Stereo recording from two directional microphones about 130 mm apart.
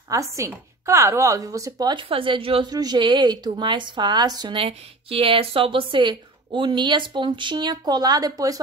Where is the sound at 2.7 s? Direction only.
30° right (ahead or behind).